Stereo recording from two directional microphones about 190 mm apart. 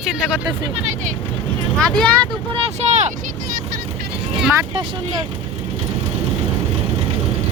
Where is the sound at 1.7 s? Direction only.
5° left (ahead or behind).